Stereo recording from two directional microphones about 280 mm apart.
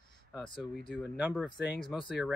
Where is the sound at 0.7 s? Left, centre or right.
Centre.